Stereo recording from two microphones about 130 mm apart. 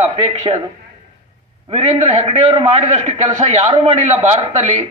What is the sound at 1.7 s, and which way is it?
A man's voice, 50° right (ahead or behind).